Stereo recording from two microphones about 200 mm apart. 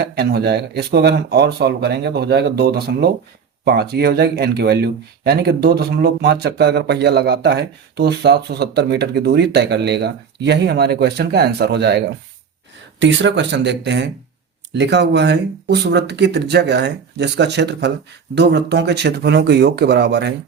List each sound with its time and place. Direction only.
0.0 s speech: 55° right (ahead or behind)